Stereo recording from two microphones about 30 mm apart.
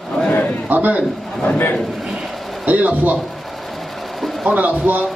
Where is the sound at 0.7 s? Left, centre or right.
Right.